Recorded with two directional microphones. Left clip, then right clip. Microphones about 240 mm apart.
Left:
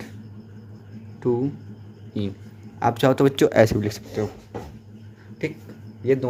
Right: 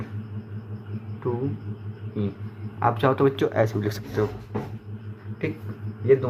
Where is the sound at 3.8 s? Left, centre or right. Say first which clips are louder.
Right 1 dB; left.